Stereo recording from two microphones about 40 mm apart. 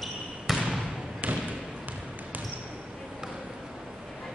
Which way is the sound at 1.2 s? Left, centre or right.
Right.